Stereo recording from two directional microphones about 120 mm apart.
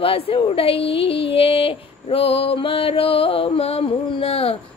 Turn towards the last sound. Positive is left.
turn(degrees=55)  # may be behind; listen again after turning